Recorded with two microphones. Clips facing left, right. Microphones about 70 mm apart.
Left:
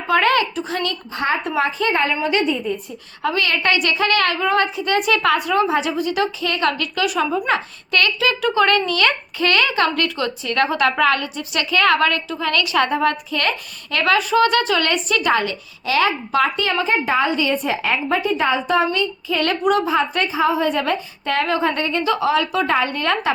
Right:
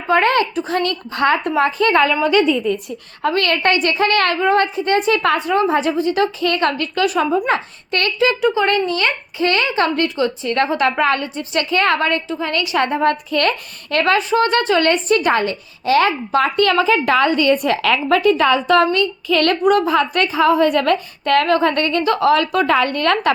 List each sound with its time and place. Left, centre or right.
0.1 s a woman's voice: right
1.5 s speech: right
2.7 s a woman's voice: right
3.2 s speech: right
3.6 s a woman's voice: right
6.4 s a woman's voice: right
7.3 s speech: right
8.4 s speech: centre
13.3 s speech: right
14.0 s a woman's voice: right
16.6 s a woman's voice: right
19.3 s a woman's voice: right
19.6 s a woman's voice: right